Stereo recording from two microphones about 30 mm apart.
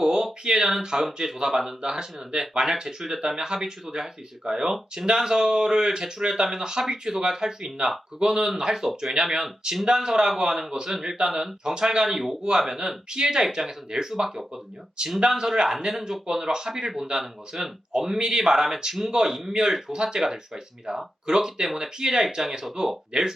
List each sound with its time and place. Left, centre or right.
0.0 s a sound: centre
0.4 s speech: right
15.0 s speech: right
15.7 s speech: centre; by 21.0 s right
21.2 s speech: centre